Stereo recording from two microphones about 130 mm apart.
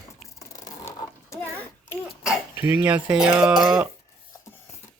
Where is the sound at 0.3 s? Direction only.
25° left (ahead or behind).